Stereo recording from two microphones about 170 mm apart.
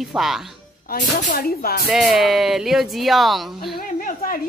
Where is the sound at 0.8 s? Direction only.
50° left (ahead or behind).